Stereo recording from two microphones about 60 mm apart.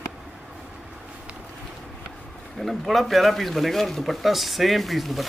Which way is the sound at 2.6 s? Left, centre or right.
Centre.